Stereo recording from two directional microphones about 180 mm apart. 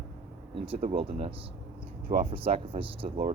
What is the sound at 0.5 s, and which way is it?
Speech, 30° right (ahead or behind).